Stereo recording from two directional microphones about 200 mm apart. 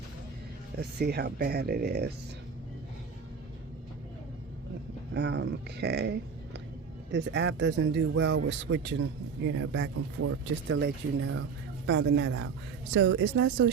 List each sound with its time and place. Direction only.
0.8 s speech: 55° right (ahead or behind)
5.1 s speech: 60° right (ahead or behind)